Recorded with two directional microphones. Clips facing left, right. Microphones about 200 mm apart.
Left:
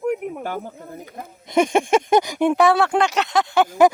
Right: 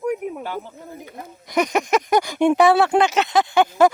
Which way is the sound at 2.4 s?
Centre (ahead or behind).